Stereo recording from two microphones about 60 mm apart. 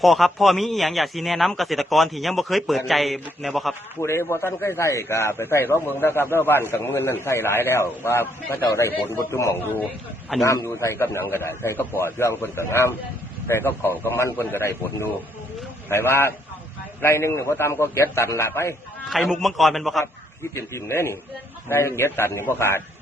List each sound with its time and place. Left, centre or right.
0.0 s a man's voice: centre
4.0 s a man's voice: left
9.6 s a man's voice: left
10.3 s a man's voice: centre
10.7 s a man's voice: left
19.0 s a man's voice: centre
20.4 s a man's voice: left